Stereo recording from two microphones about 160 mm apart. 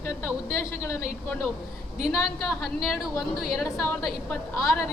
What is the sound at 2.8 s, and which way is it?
Speech, centre (ahead or behind).